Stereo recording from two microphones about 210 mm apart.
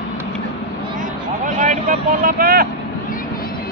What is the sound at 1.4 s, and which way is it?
Vehicle, 35° right (ahead or behind).